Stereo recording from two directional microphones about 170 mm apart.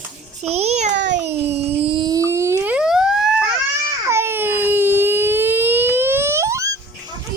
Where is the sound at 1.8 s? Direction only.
25° right (ahead or behind); by 3.5 s 5° right (ahead or behind).